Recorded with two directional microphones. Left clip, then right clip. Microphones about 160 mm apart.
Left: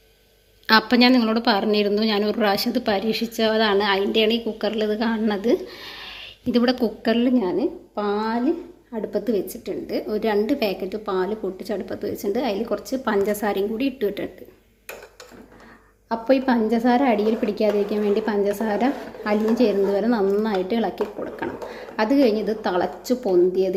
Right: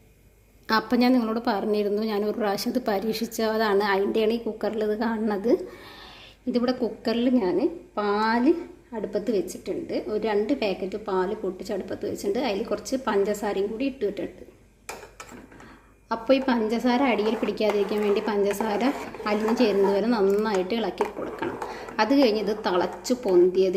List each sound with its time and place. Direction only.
0.7 s a woman's voice: 5° right (ahead or behind)
9.0 s a woman's voice: 5° left (ahead or behind)
16.0 s a woman's voice: 5° left (ahead or behind)